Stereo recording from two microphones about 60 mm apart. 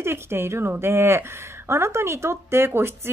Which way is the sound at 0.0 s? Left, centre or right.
Right.